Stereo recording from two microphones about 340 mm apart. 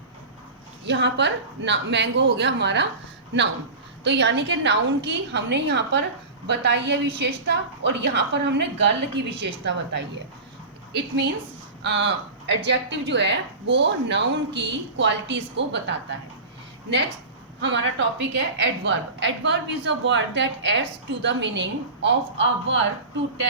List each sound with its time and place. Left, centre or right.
0.9 s a woman's voice: right
11.8 s a woman's voice: right
17.6 s a woman's voice: right